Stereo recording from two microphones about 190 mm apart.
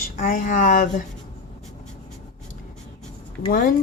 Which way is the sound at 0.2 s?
45° left (ahead or behind).